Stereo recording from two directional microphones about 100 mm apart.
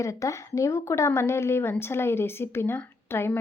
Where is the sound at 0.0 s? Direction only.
30° left (ahead or behind).